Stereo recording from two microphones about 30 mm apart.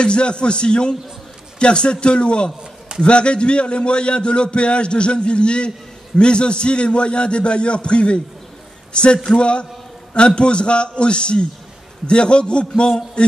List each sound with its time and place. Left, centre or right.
0.0 s a man's voice: left